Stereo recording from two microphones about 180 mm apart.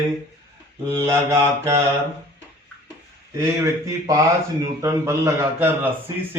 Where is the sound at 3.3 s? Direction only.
20° right (ahead or behind).